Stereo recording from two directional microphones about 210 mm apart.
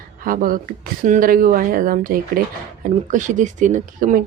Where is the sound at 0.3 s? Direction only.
40° right (ahead or behind).